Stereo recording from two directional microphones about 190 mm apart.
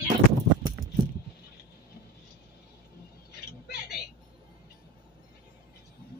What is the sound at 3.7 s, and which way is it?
Vehicle, 60° left (ahead or behind).